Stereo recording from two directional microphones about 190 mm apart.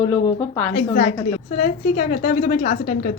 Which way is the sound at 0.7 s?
35° left (ahead or behind).